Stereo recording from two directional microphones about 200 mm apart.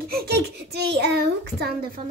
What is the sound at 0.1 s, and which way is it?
A child's voice, 50° right (ahead or behind).